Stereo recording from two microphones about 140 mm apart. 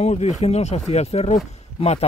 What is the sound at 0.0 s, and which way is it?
Speech, 55° left (ahead or behind).